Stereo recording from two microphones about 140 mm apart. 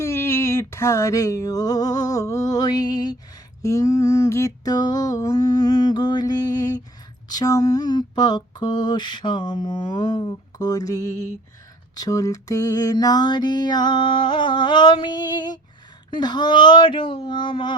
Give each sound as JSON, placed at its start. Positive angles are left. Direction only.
{"t": 0.0, "sound": "music", "side_deg": 15}
{"t": 3.6, "sound": "a sound", "side_deg": 25}
{"t": 7.3, "sound": "mantra", "side_deg": 25}